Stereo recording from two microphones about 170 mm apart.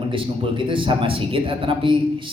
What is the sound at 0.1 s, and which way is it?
Speech, 30° right (ahead or behind).